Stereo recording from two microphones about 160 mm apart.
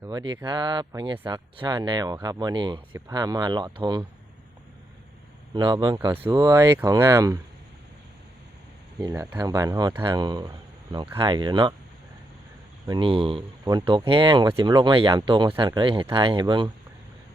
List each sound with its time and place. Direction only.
0.0 s speech: 25° right (ahead or behind)
5.5 s speech: 30° right (ahead or behind)
6.1 s speech: 15° right (ahead or behind)
9.4 s speech: 20° right (ahead or behind)
12.9 s speech: 35° right (ahead or behind)